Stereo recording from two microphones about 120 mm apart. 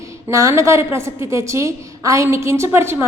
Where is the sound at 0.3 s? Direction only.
25° right (ahead or behind).